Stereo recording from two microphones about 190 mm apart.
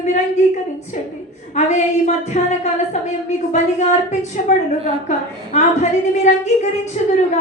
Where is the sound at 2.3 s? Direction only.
40° left (ahead or behind).